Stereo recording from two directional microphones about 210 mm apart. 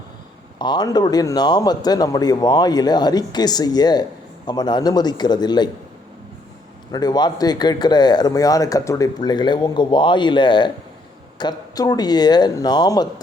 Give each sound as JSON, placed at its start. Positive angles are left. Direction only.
{"t": 0.6, "sound": "a man's voice", "side_deg": 20}
{"t": 6.9, "sound": "a man's voice", "side_deg": 20}